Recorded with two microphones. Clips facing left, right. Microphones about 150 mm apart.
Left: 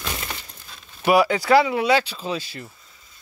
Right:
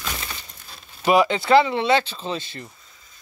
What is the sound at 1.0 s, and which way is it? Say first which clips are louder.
Speech: even; 10° left (ahead or behind).